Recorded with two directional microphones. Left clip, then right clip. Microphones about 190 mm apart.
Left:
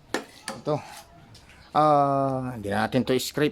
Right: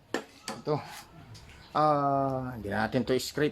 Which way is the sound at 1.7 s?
60° left (ahead or behind).